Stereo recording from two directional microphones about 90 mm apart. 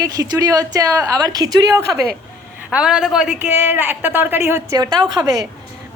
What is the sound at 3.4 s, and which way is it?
A woman's voice, 25° right (ahead or behind).